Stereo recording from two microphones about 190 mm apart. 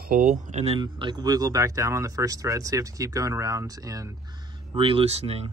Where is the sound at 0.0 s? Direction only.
45° right (ahead or behind).